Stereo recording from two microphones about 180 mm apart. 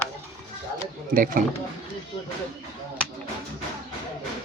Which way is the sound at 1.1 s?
50° right (ahead or behind).